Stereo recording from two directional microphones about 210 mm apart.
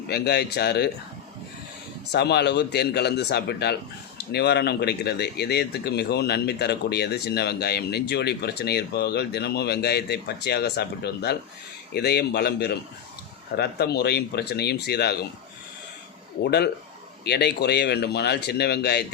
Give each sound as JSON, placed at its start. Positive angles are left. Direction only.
{"t": 0.1, "sound": "speech", "side_deg": 50}
{"t": 2.1, "sound": "speech", "side_deg": 50}
{"t": 16.4, "sound": "speech", "side_deg": 50}